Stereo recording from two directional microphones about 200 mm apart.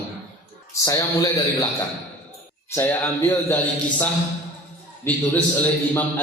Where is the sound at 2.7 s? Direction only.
10° left (ahead or behind).